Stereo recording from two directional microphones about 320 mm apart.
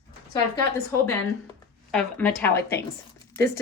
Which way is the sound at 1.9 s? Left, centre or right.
Centre.